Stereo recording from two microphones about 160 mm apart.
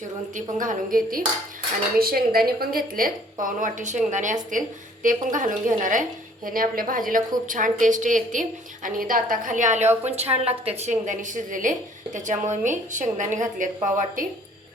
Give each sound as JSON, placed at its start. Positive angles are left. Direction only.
{"t": 0.6, "sound": "a woman's voice", "side_deg": -60}
{"t": 9.8, "sound": "a woman's voice", "side_deg": -15}
{"t": 10.1, "sound": "a woman's voice", "side_deg": -40}